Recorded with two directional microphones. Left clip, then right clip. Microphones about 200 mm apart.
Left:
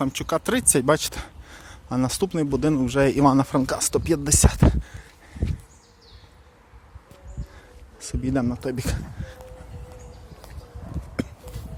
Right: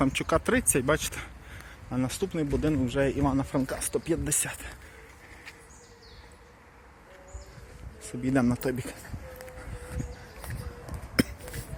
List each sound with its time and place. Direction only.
0.0 s speech: 10° left (ahead or behind)
0.5 s speech: 30° left (ahead or behind)
8.2 s speech: 15° left (ahead or behind)
8.7 s speech: 40° left (ahead or behind)